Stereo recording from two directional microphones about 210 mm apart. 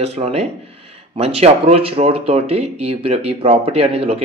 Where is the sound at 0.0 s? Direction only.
30° right (ahead or behind).